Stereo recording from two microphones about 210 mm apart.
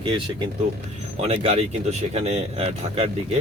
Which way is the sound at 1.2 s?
30° right (ahead or behind).